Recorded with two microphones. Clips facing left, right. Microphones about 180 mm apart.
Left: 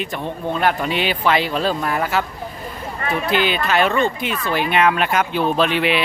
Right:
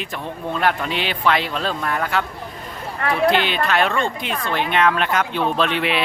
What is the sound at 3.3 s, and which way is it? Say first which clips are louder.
Speech: left 1 dB; 5° left (ahead or behind).